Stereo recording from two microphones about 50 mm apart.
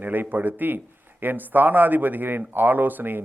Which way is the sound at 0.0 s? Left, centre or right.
Right.